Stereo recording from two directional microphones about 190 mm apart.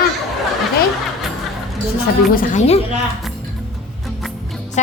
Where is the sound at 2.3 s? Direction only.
45° left (ahead or behind).